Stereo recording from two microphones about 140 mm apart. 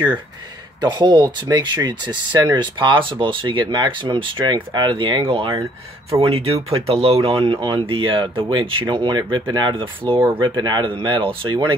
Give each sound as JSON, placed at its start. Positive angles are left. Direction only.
{"t": 0.7, "sound": "speech", "side_deg": -30}